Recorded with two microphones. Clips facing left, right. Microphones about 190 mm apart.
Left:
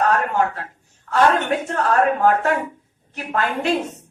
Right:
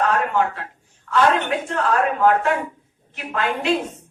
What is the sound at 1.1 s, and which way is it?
Speech, 45° left (ahead or behind).